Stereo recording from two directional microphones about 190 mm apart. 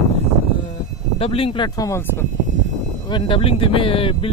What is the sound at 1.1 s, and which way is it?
Speech, 30° left (ahead or behind).